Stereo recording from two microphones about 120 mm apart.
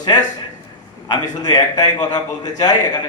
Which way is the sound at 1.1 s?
35° left (ahead or behind).